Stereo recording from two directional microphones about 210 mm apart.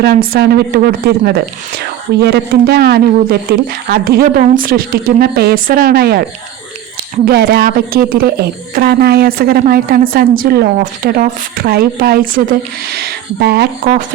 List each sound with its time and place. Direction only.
0.0 s a woman's voice: 50° right (ahead or behind)
7.3 s a woman's voice: 45° right (ahead or behind)